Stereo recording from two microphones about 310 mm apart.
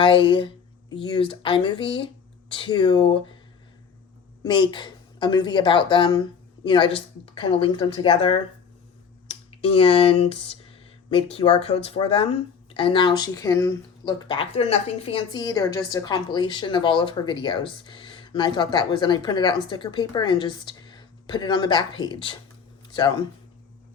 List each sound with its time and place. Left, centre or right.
0.0 s speech: centre
4.4 s speech: centre